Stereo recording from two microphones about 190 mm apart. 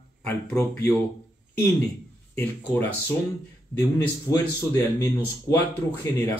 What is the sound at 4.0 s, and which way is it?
Speech, 15° left (ahead or behind).